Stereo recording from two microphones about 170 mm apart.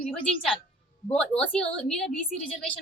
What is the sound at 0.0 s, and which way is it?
A woman's voice, 5° left (ahead or behind).